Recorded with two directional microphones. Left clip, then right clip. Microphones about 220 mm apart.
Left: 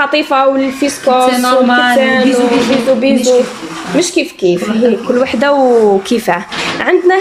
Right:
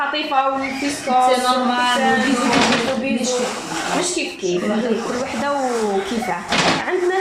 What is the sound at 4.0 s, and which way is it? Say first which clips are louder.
Speech: left 11 dB; 50° left (ahead or behind).